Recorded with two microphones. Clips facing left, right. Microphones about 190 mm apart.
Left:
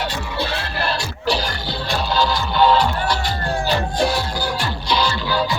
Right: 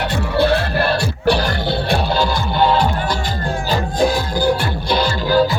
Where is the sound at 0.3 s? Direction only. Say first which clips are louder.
Right 11 dB; 55° right (ahead or behind).